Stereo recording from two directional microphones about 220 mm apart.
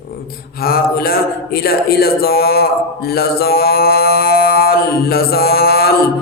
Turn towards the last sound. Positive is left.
turn(degrees=45)  # may be behind; listen again after turning